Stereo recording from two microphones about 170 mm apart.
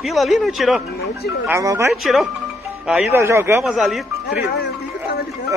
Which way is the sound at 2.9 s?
10° right (ahead or behind).